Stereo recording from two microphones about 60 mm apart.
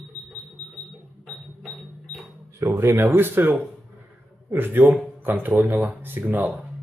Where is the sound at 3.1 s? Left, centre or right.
Right.